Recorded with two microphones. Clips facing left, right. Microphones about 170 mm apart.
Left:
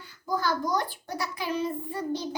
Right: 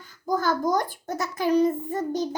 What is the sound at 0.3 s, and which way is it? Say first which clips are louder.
A child's voice: right 4 dB; 45° right (ahead or behind).